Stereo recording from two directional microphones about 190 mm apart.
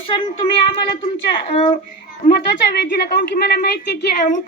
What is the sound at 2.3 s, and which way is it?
A woman's voice, 60° left (ahead or behind).